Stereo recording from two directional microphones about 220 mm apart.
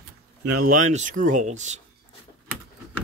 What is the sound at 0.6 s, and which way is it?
Speech, 35° right (ahead or behind).